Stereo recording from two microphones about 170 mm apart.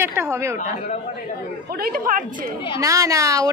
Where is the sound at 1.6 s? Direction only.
60° right (ahead or behind).